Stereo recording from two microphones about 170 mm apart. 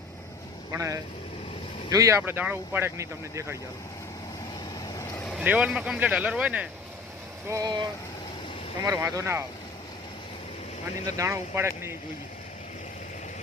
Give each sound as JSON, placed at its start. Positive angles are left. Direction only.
{"t": 0.7, "sound": "speech", "side_deg": -20}
{"t": 4.9, "sound": "vehicle", "side_deg": 20}
{"t": 5.2, "sound": "vehicle", "side_deg": 0}
{"t": 5.5, "sound": "speech", "side_deg": -10}
{"t": 7.4, "sound": "speech", "side_deg": -20}
{"t": 11.0, "sound": "speech", "side_deg": -15}